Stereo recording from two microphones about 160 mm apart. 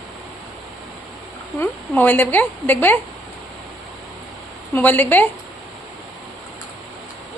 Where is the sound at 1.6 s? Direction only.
10° left (ahead or behind).